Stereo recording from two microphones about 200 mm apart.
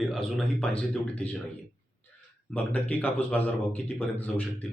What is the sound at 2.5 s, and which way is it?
A man's voice, 5° left (ahead or behind).